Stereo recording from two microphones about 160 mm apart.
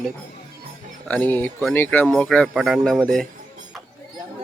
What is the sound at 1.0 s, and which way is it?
Speech, 10° left (ahead or behind).